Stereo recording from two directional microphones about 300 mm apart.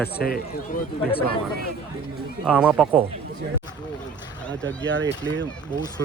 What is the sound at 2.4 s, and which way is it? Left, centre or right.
Speech, centre.